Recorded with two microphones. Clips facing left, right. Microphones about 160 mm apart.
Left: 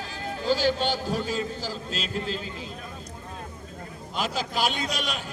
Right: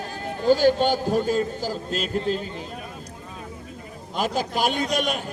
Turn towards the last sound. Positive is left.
turn(degrees=-50)  # may be behind; listen again after turning